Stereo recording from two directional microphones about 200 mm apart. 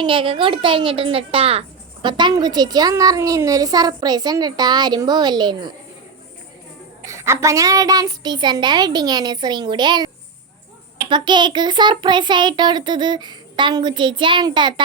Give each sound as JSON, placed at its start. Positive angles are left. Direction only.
{"t": 0.0, "sound": "a woman's voice", "side_deg": -25}
{"t": 7.0, "sound": "a woman's voice", "side_deg": -15}
{"t": 11.1, "sound": "a woman's voice", "side_deg": -25}